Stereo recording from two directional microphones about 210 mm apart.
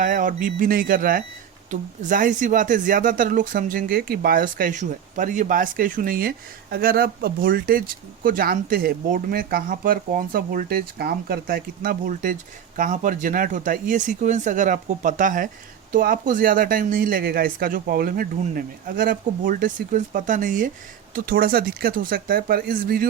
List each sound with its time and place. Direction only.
0.0 s speech: 40° right (ahead or behind)